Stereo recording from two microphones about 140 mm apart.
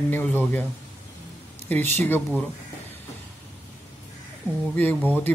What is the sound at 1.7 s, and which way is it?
Speech, 15° left (ahead or behind).